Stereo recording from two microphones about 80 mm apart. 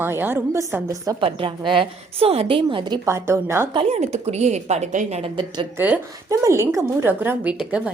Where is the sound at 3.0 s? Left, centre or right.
Right.